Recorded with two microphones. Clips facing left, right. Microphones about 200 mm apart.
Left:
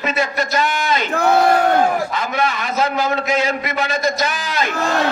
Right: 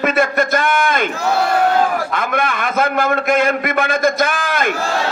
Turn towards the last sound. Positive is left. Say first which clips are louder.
# right 3 dB
turn(degrees=-55)  # may be behind; listen again after turning